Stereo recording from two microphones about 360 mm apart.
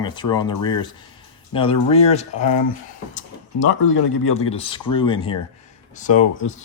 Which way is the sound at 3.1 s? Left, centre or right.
Left.